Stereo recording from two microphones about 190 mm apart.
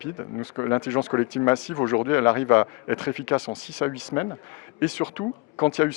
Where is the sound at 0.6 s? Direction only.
15° left (ahead or behind).